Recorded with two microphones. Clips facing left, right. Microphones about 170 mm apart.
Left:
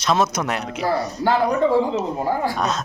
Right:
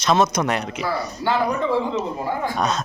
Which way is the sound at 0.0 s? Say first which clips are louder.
Right 2 dB; 5° left (ahead or behind).